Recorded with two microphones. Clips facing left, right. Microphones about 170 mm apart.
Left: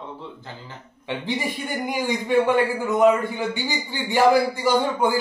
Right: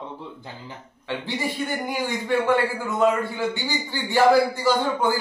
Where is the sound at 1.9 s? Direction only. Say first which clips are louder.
Left 5 dB; 15° left (ahead or behind).